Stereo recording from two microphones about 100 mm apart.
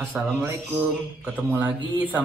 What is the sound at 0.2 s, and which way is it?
Speech, 10° right (ahead or behind).